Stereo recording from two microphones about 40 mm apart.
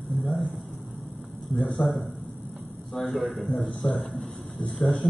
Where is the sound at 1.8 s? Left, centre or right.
Centre.